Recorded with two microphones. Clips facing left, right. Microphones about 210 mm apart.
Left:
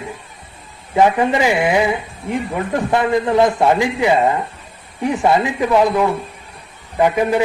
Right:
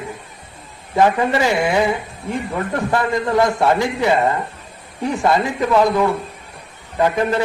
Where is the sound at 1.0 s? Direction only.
15° left (ahead or behind).